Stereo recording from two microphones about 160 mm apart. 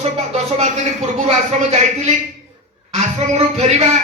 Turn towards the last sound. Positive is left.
turn(degrees=-45)  # may be behind; listen again after turning